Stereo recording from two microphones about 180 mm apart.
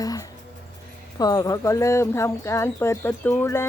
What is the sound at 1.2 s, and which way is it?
Speech, 20° left (ahead or behind).